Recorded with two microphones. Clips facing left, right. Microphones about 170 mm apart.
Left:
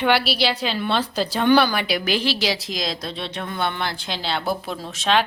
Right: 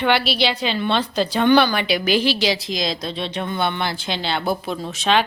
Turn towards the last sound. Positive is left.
turn(degrees=0)  # may be behind; listen again after turning